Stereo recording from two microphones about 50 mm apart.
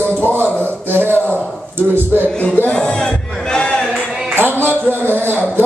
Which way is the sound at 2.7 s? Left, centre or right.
Centre.